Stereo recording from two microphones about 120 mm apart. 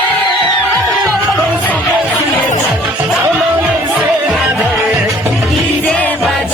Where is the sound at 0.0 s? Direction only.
10° left (ahead or behind).